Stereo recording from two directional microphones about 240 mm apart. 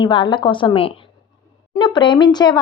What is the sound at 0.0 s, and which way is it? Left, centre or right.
A woman's voice, centre.